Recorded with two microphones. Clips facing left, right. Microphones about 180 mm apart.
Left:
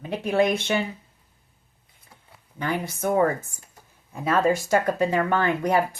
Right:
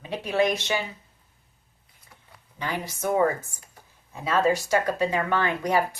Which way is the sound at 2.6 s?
55° left (ahead or behind).